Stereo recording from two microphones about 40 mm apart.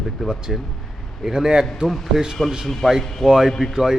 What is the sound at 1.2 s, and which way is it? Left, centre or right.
Speech, centre.